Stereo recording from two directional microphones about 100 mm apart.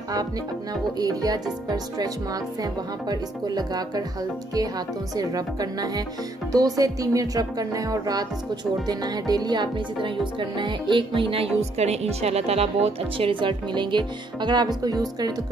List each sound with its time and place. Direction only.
0.9 s speech: 40° right (ahead or behind)
8.8 s music: 40° right (ahead or behind)